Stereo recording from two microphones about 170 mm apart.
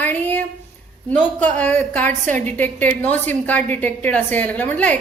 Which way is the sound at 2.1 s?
45° right (ahead or behind).